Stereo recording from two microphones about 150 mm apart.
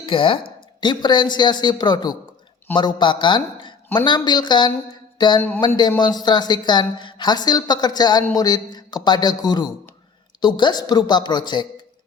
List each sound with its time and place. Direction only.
0.0 s a woman's voice: 35° left (ahead or behind)
5.1 s a sound: 30° left (ahead or behind)
5.5 s a woman's voice: 30° left (ahead or behind)